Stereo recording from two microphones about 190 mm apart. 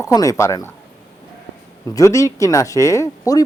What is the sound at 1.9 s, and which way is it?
Speech, 15° left (ahead or behind).